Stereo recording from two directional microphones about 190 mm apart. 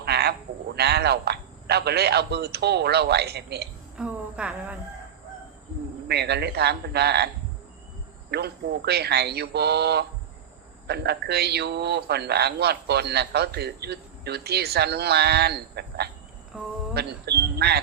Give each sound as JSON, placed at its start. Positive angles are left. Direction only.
{"t": 0.0, "sound": "frog", "side_deg": -55}
{"t": 0.8, "sound": "a man's voice", "side_deg": -60}
{"t": 3.9, "sound": "a woman's voice", "side_deg": -5}
{"t": 6.1, "sound": "a man's voice", "side_deg": -60}
{"t": 8.3, "sound": "a man's voice", "side_deg": -55}
{"t": 16.5, "sound": "a sound", "side_deg": -5}
{"t": 16.9, "sound": "speech", "side_deg": -60}